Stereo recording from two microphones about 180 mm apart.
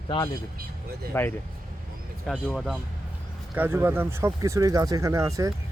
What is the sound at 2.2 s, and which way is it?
Speech, centre (ahead or behind).